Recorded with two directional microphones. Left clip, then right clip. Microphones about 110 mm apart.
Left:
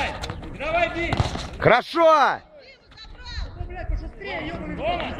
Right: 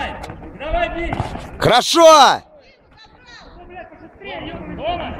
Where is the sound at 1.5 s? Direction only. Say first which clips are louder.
Right 5 dB; 40° right (ahead or behind).